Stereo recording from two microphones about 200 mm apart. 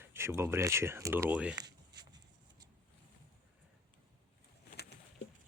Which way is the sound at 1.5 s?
20° right (ahead or behind).